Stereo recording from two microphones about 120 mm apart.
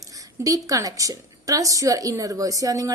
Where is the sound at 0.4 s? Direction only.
30° right (ahead or behind).